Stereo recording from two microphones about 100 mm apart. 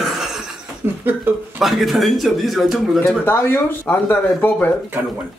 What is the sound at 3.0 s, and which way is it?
Speech, 25° left (ahead or behind).